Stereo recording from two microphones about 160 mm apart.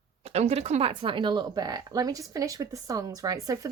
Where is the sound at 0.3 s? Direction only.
40° right (ahead or behind).